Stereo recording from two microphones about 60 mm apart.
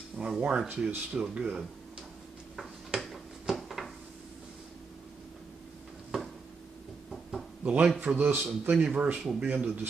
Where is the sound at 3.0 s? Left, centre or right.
Centre.